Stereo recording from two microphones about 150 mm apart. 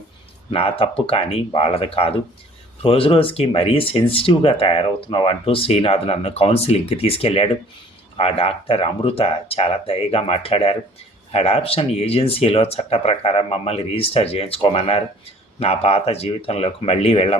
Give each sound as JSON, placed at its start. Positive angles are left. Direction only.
{"t": 0.5, "sound": "speech", "side_deg": 40}